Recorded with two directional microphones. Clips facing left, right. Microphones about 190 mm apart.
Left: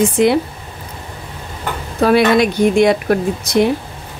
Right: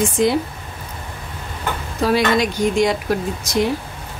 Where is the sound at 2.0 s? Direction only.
60° left (ahead or behind).